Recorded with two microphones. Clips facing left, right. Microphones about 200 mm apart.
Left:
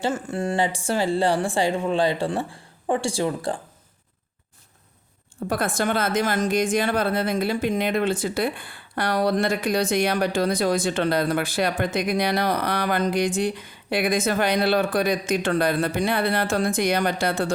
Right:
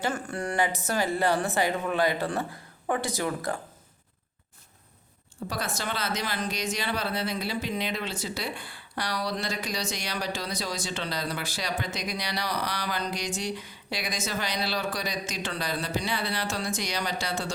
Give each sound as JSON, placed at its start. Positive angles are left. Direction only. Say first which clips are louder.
{"t": 0.0, "sound": "speech", "louder": "left 5 dB", "side_deg": 25}
{"t": 5.5, "sound": "speech", "louder": "left 9 dB", "side_deg": 55}